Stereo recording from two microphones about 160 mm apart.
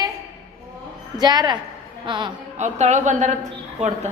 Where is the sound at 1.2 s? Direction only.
25° right (ahead or behind).